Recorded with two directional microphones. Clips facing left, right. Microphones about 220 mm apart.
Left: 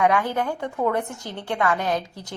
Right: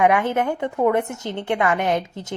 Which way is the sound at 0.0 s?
20° right (ahead or behind).